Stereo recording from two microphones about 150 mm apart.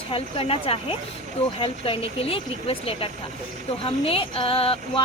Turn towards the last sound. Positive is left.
turn(degrees=40)  # may be behind; listen again after turning